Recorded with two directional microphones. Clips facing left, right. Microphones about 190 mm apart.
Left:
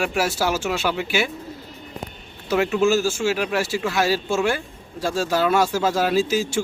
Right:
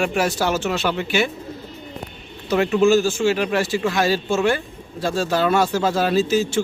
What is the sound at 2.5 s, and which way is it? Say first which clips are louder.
Speech: right 3 dB; 5° left (ahead or behind).